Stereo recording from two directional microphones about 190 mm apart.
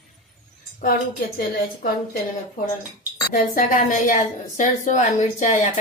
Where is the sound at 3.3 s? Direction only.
45° left (ahead or behind).